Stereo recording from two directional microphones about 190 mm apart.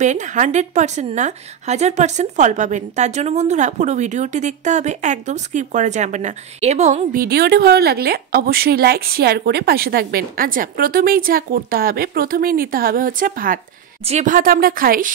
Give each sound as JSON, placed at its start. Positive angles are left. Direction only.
{"t": 0.0, "sound": "speech", "side_deg": -40}